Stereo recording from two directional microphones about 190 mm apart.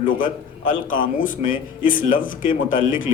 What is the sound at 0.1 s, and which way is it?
Speech, 45° left (ahead or behind).